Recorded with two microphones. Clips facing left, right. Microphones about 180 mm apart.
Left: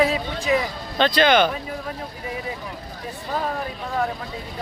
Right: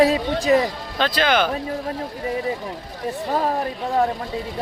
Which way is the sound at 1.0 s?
5° right (ahead or behind).